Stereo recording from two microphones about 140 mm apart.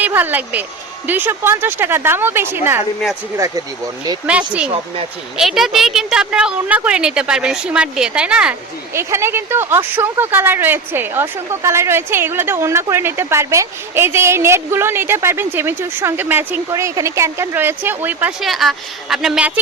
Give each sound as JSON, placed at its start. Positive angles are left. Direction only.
{"t": 0.0, "sound": "a woman's voice", "side_deg": -15}
{"t": 4.3, "sound": "a woman's voice", "side_deg": -10}
{"t": 9.0, "sound": "a woman's voice", "side_deg": -20}
{"t": 18.4, "sound": "a woman's voice", "side_deg": 0}